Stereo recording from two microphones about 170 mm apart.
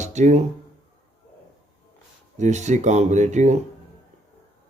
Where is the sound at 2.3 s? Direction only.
45° right (ahead or behind).